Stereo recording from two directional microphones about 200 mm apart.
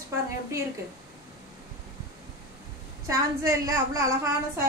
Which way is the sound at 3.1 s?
15° right (ahead or behind).